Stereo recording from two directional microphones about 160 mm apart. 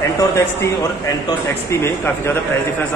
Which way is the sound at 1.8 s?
15° left (ahead or behind).